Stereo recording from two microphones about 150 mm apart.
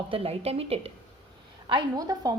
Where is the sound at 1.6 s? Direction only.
30° right (ahead or behind).